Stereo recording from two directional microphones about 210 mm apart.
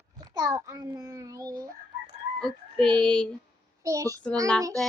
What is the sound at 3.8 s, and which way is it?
Speech, 15° right (ahead or behind).